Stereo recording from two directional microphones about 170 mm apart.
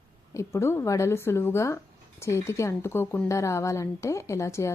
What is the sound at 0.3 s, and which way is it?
Speech, 15° left (ahead or behind).